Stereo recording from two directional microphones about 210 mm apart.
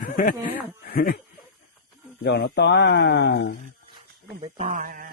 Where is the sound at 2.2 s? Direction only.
50° left (ahead or behind).